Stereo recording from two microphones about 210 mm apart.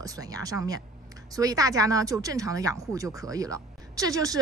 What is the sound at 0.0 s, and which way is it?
Speech, 15° right (ahead or behind).